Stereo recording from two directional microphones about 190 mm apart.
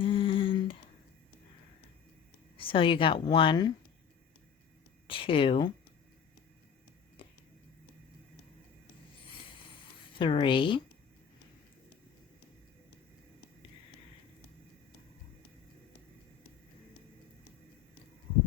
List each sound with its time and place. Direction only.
0.0 s humming: 25° left (ahead or behind)
2.6 s a woman's voice: 25° left (ahead or behind)
5.0 s a woman's voice: 30° left (ahead or behind)
7.2 s a sound: 30° left (ahead or behind)
10.2 s a woman's voice: 25° left (ahead or behind)